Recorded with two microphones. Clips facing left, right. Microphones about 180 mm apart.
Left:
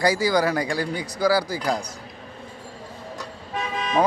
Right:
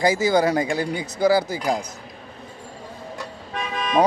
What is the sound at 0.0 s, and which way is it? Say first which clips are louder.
Speech: right 2 dB; 20° right (ahead or behind).